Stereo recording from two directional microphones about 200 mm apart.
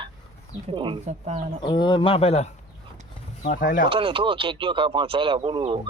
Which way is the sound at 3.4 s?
40° left (ahead or behind).